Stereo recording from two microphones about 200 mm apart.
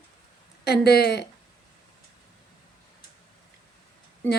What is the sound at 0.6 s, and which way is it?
Speech, 55° left (ahead or behind).